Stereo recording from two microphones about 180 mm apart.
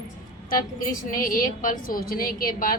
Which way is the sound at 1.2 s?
50° left (ahead or behind).